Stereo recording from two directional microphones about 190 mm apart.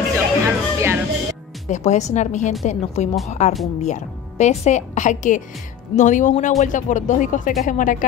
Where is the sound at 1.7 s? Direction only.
35° left (ahead or behind).